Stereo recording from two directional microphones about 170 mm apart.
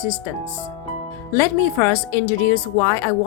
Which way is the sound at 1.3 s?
15° left (ahead or behind).